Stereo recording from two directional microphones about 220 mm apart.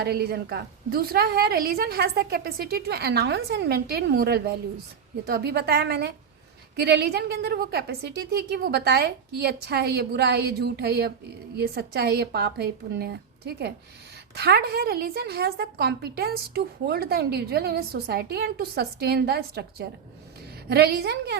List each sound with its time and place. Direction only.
0.0 s a woman's voice: 45° right (ahead or behind)